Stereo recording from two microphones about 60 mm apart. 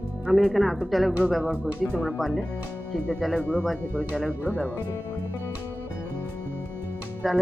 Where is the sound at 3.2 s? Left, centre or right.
Centre.